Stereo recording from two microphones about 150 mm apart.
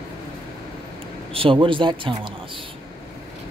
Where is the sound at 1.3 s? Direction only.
35° right (ahead or behind).